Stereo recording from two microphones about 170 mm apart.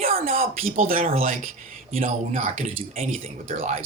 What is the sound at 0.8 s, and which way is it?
Speech, 55° right (ahead or behind).